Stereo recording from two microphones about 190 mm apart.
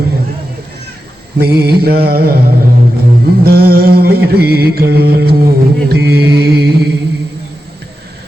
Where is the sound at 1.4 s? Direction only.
55° right (ahead or behind).